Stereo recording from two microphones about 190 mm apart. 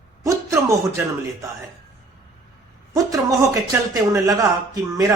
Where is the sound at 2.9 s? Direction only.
15° right (ahead or behind).